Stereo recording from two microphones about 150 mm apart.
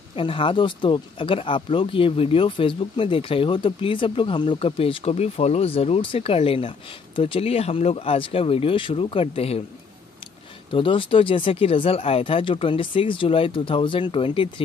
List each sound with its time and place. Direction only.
0.1 s speech: 35° left (ahead or behind)
10.7 s speech: 35° left (ahead or behind)